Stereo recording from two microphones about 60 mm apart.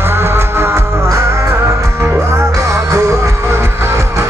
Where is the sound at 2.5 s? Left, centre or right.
Right.